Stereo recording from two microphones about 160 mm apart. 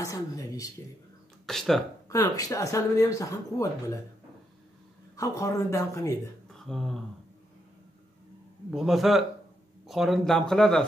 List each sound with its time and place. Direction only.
0.0 s speech: 20° left (ahead or behind)
1.4 s speech: centre (ahead or behind)
2.0 s speech: 20° left (ahead or behind)
5.1 s speech: 20° left (ahead or behind)
6.6 s speech: centre (ahead or behind)
8.6 s speech: centre (ahead or behind)